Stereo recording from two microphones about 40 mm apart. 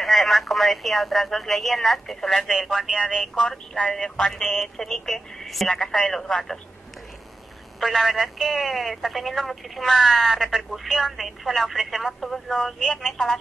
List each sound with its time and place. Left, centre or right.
0.0 s speech: centre
3.4 s speech: left
3.9 s speech: centre
7.8 s speech: centre